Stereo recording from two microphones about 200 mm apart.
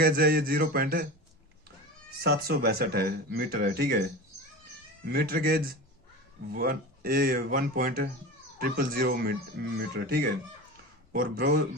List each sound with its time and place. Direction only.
0.0 s speech: 50° right (ahead or behind)
2.2 s speech: 50° right (ahead or behind)
5.0 s speech: 50° right (ahead or behind)